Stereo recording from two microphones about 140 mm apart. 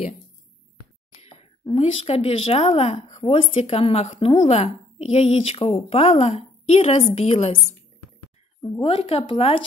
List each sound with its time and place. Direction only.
1.1 s a sound: 45° left (ahead or behind)
1.8 s a woman's voice: 45° left (ahead or behind)
8.7 s a woman's voice: 40° left (ahead or behind)